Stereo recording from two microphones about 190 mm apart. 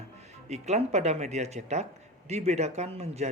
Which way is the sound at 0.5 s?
35° right (ahead or behind).